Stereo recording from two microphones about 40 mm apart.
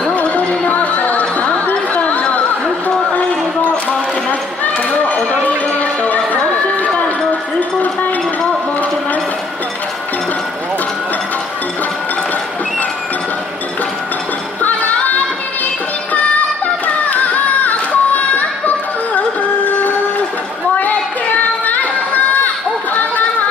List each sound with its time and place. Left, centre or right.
0.1 s music: left
1.3 s chatter: left
2.2 s a sound: left
5.3 s run: left
14.6 s music: left
20.7 s a sound: left